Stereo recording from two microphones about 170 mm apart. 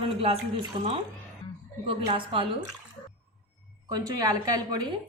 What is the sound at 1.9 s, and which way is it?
Speech, 30° right (ahead or behind).